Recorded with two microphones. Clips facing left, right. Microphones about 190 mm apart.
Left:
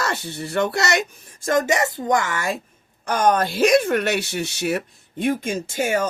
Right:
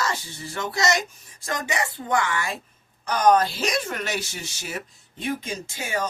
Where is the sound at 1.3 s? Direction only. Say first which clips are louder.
Left 8 dB; 45° left (ahead or behind).